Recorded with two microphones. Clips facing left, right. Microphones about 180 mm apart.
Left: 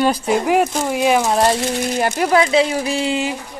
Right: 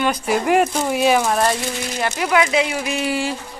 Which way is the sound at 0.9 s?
10° left (ahead or behind).